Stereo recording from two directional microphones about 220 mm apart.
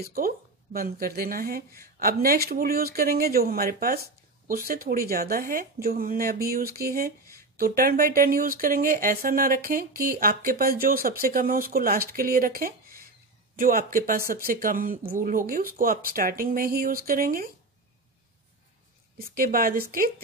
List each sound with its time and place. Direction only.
0.0 s speech: 40° right (ahead or behind)
19.1 s speech: 40° right (ahead or behind)